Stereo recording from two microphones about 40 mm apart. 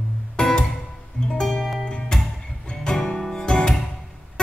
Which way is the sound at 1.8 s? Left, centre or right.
Left.